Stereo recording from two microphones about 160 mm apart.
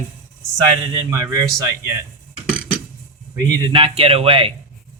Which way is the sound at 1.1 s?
20° right (ahead or behind).